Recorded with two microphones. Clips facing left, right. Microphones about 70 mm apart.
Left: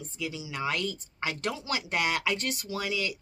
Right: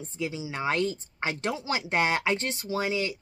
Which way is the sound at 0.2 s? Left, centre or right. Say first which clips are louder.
Right 3 dB; right.